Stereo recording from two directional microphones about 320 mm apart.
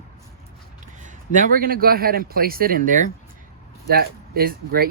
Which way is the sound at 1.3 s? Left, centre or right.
Right.